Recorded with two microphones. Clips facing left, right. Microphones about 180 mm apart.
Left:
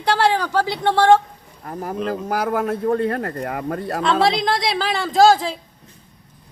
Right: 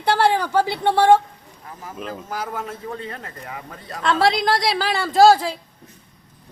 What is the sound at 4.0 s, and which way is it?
Speech, centre (ahead or behind).